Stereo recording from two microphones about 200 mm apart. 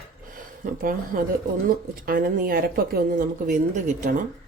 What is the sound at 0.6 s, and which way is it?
A woman's voice, 45° right (ahead or behind).